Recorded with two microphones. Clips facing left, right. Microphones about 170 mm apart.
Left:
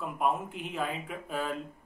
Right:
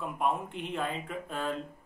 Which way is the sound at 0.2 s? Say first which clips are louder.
Left 1 dB; 5° left (ahead or behind).